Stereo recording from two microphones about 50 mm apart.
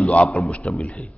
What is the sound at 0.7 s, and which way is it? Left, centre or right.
Speech, centre.